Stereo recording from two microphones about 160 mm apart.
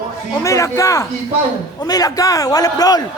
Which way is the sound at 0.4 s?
20° left (ahead or behind).